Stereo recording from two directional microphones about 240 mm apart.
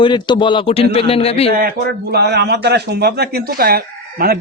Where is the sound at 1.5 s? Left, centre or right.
Right.